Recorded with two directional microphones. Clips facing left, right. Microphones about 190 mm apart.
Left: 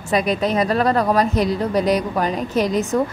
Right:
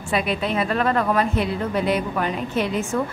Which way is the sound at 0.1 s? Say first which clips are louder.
Left 4 dB; 40° left (ahead or behind).